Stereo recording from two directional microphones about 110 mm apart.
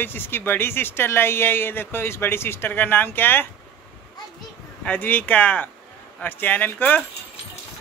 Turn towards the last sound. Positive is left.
turn(degrees=15)  # may be behind; listen again after turning